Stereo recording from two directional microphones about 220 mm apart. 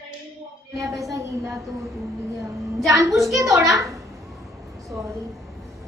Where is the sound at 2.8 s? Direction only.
15° right (ahead or behind).